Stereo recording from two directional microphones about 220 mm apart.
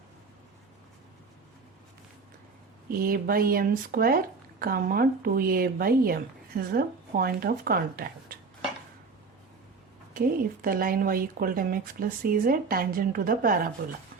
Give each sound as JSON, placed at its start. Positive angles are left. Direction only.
{"t": 3.0, "sound": "speech", "side_deg": -40}
{"t": 10.2, "sound": "speech", "side_deg": -40}